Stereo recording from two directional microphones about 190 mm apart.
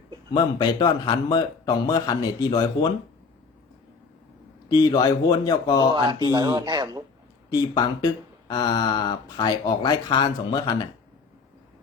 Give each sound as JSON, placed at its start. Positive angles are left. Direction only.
{"t": 0.3, "sound": "speech", "side_deg": 25}
{"t": 4.7, "sound": "speech", "side_deg": 20}
{"t": 6.2, "sound": "speech", "side_deg": -20}
{"t": 7.5, "sound": "speech", "side_deg": 20}